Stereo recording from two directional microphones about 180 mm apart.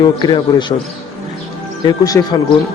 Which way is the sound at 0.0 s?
25° left (ahead or behind).